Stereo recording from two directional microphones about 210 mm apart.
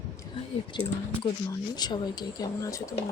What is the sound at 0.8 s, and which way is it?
A woman's voice, 20° left (ahead or behind).